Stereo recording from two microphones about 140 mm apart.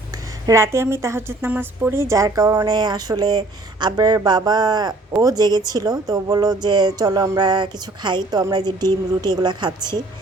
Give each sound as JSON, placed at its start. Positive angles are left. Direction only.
{"t": 0.4, "sound": "a woman's voice", "side_deg": -20}